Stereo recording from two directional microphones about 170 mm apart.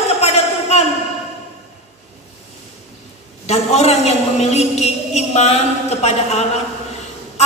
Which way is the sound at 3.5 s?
40° left (ahead or behind).